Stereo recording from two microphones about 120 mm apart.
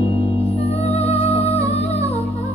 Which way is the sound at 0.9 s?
60° left (ahead or behind).